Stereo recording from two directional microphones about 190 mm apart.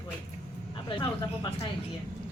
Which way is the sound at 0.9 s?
25° left (ahead or behind).